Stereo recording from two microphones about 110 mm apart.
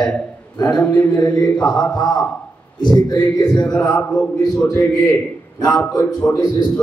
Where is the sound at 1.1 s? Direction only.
40° left (ahead or behind).